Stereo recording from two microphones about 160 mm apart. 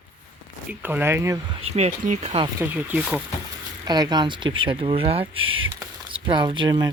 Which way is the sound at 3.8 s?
25° right (ahead or behind).